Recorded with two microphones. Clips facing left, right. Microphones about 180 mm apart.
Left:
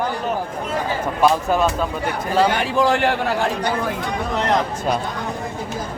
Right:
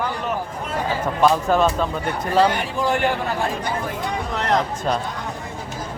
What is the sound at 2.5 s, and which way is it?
Speech, 90° left.